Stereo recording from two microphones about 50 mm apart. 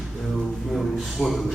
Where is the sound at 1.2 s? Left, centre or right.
Left.